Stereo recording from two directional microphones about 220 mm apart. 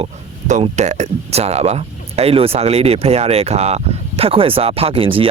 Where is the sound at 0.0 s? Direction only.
30° right (ahead or behind).